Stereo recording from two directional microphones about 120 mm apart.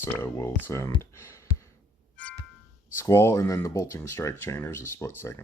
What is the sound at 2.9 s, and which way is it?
Speech, 20° left (ahead or behind).